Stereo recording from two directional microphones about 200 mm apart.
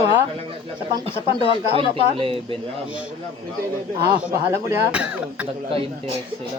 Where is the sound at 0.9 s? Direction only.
25° right (ahead or behind).